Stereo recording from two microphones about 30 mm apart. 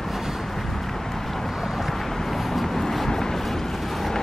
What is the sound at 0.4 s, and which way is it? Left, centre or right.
Vehicle, centre.